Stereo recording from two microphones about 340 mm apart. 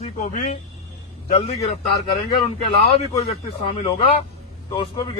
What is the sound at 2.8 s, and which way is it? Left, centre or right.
Speech, centre.